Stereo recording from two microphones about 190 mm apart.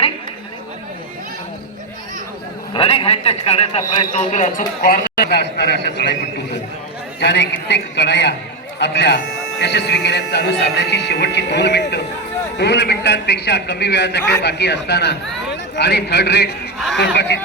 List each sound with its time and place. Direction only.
2.7 s a man's voice: 30° left (ahead or behind); by 6.1 s 60° left (ahead or behind)
7.2 s speech: 65° left (ahead or behind)